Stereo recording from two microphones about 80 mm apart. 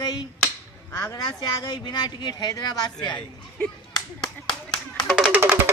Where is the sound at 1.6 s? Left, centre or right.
Left.